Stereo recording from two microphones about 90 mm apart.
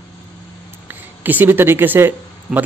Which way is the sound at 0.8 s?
20° right (ahead or behind).